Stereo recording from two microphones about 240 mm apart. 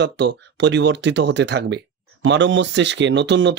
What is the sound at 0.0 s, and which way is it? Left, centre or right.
Speech, right.